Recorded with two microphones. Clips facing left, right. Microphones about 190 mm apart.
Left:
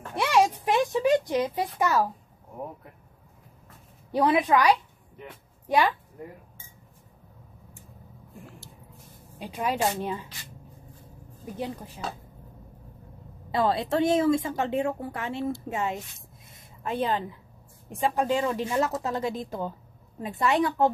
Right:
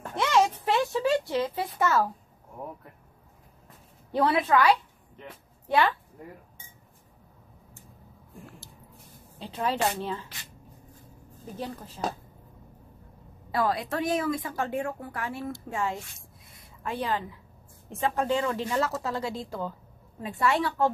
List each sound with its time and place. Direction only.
0.1 s a sound: 10° left (ahead or behind)
4.1 s speech: 15° left (ahead or behind)
9.4 s speech: 10° left (ahead or behind)
11.5 s speech: 15° left (ahead or behind)
13.5 s a woman's voice: 25° left (ahead or behind)
16.5 s a sound: 20° left (ahead or behind)
17.8 s a woman's voice: 15° left (ahead or behind)